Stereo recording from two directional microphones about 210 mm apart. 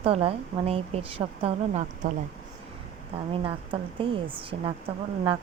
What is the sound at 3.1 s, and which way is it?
Speech, 25° right (ahead or behind).